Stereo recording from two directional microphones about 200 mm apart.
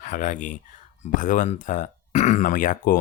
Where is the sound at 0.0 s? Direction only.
40° left (ahead or behind).